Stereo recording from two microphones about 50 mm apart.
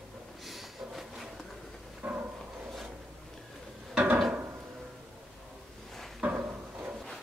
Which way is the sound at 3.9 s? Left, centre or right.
Right.